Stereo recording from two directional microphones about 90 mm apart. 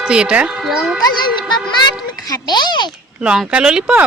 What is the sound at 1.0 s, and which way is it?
A child's voice, 50° left (ahead or behind).